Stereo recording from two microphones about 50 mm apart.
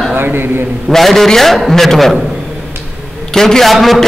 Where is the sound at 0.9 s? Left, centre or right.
Centre.